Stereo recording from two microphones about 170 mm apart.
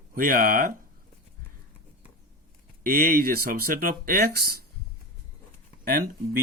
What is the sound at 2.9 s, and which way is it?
Speech, 55° right (ahead or behind).